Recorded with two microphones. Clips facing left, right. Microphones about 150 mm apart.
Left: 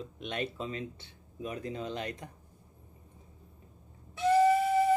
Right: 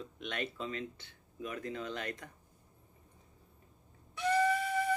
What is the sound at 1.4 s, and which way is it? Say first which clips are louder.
Speech: left 3 dB; 30° left (ahead or behind).